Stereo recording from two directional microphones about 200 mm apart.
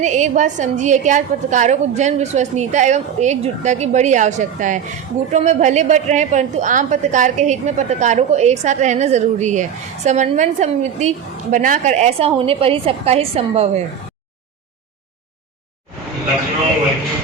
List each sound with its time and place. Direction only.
0.0 s a woman's voice: 35° right (ahead or behind)